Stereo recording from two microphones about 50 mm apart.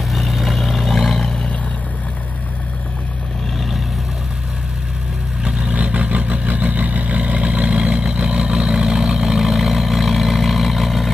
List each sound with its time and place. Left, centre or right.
0.1 s vehicle: centre
5.4 s vehicle: right; by 11.1 s centre